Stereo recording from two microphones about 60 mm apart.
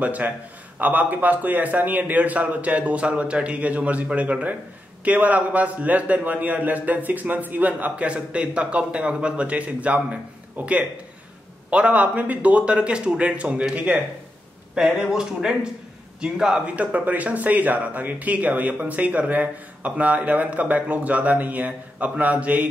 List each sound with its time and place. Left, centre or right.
0.0 s speech: right
14.8 s speech: centre
16.6 s speech: right